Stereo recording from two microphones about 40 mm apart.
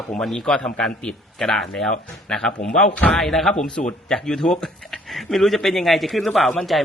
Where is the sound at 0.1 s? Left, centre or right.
Centre.